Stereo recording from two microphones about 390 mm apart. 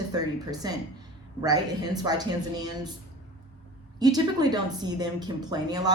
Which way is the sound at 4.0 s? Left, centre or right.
Centre.